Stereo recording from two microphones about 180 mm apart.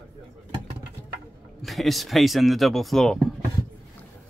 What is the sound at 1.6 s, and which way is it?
Speech, centre (ahead or behind).